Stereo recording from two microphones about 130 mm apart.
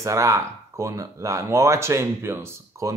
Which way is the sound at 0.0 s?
25° right (ahead or behind).